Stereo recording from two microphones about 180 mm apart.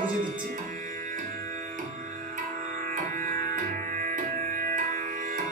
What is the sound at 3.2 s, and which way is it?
Music, 45° right (ahead or behind).